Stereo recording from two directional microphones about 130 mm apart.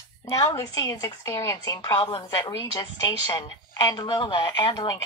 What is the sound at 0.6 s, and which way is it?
Speech, 30° left (ahead or behind).